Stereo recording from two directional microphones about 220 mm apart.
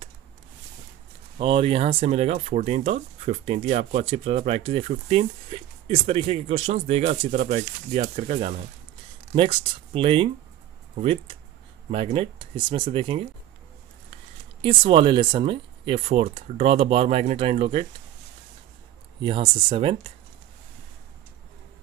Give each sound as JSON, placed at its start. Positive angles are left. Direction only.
{"t": 1.4, "sound": "speech", "side_deg": -25}
{"t": 11.9, "sound": "speech", "side_deg": -25}
{"t": 14.6, "sound": "speech", "side_deg": -25}
{"t": 19.2, "sound": "speech", "side_deg": -25}